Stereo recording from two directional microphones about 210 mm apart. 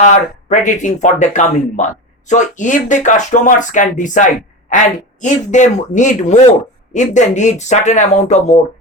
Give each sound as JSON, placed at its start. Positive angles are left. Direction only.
{"t": 0.0, "sound": "speech", "side_deg": 35}